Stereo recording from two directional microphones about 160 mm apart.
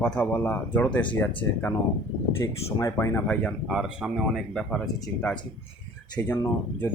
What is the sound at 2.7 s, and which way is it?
Speech, 20° left (ahead or behind).